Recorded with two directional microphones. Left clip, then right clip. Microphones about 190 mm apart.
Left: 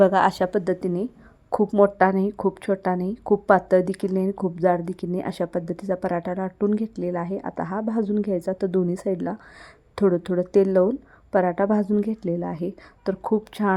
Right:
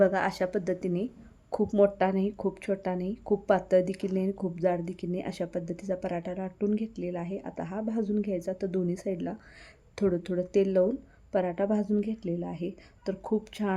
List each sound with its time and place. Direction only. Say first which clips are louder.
0.0 s a woman's voice: left 7 dB; 20° left (ahead or behind)